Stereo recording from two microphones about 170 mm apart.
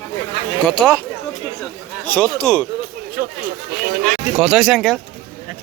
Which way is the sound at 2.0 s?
5° left (ahead or behind).